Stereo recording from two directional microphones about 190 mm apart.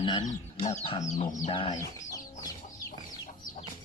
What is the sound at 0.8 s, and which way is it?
Chicken, 35° left (ahead or behind).